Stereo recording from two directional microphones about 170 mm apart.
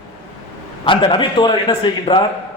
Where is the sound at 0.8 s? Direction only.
30° left (ahead or behind).